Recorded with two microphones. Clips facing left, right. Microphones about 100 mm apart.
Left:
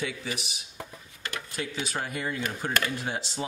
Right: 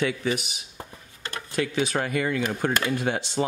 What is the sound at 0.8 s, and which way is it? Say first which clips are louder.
Dishes: even; 30° right (ahead or behind).